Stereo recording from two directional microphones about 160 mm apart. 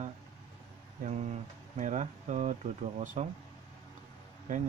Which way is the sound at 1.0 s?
45° right (ahead or behind).